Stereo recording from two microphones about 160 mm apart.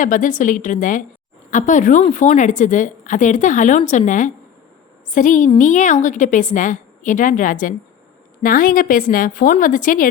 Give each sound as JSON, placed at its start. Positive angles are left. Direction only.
{"t": 0.0, "sound": "a woman's voice", "side_deg": 55}